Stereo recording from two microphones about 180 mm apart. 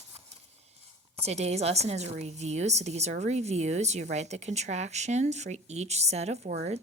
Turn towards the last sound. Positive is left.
turn(degrees=-40)  # may be behind; listen again after turning